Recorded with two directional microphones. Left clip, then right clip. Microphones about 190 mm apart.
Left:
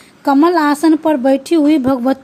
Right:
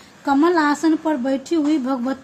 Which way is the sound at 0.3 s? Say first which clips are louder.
Left 5 dB; 45° left (ahead or behind).